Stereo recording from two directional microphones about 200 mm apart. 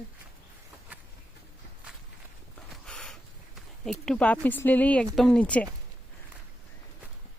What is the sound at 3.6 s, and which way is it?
Speech, centre (ahead or behind).